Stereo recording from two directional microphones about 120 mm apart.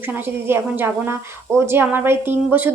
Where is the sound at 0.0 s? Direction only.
15° right (ahead or behind).